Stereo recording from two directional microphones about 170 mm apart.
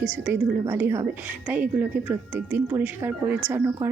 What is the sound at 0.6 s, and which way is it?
A woman's voice, 15° right (ahead or behind).